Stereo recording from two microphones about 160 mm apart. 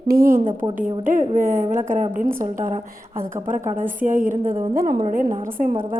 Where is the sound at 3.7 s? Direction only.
10° right (ahead or behind).